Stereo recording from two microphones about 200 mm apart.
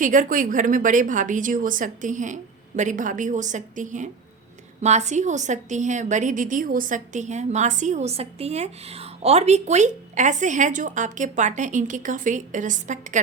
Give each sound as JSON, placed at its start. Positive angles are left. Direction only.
{"t": 0.0, "sound": "a woman's voice", "side_deg": -40}